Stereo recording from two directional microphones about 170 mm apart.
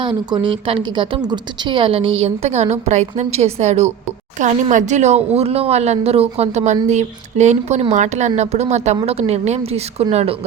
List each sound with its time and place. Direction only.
0.0 s a woman's voice: 30° right (ahead or behind)